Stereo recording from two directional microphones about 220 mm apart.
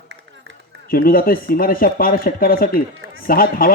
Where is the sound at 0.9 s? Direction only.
40° left (ahead or behind).